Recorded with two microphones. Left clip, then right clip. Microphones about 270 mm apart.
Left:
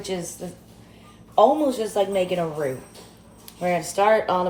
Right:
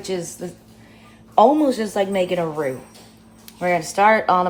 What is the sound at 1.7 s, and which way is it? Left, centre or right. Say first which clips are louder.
Speech: right 2 dB; right.